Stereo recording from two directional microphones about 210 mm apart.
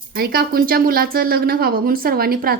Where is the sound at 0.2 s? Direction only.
45° right (ahead or behind).